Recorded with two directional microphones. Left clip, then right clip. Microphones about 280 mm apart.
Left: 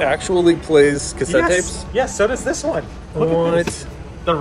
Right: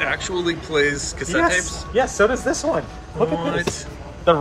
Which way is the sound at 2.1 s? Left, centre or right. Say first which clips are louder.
Right 1 dB; right.